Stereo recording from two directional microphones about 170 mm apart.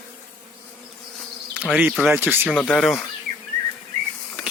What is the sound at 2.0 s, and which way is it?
Speech, 10° right (ahead or behind).